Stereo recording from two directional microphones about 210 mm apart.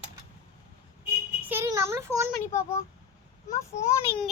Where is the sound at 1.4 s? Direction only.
10° right (ahead or behind).